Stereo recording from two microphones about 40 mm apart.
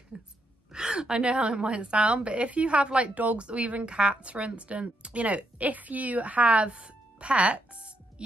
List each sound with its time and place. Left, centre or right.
0.1 s speech: right
0.7 s a sound: centre
1.3 s speech: right